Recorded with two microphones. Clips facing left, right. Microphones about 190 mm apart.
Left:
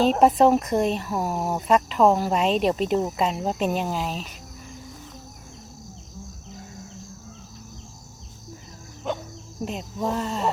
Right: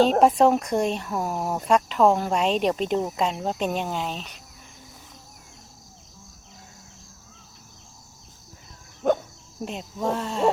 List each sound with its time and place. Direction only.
0.2 s speech: centre (ahead or behind)
9.0 s insect: 50° right (ahead or behind)
9.6 s speech: centre (ahead or behind)